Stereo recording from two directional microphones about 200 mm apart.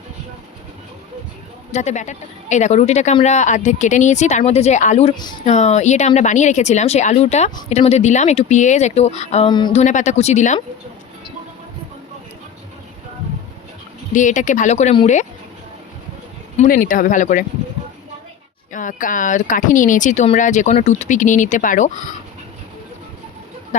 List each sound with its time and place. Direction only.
1.7 s speech: 35° left (ahead or behind)
5.5 s speech: 35° left (ahead or behind)
9.8 s speech: 35° left (ahead or behind)
14.1 s speech: 40° left (ahead or behind)
16.6 s speech: 45° left (ahead or behind)
18.7 s speech: 40° left (ahead or behind)